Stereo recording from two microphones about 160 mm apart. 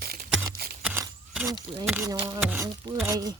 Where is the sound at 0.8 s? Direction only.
10° right (ahead or behind).